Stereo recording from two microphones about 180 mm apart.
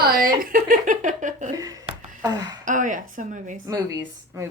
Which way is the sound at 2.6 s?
45° right (ahead or behind).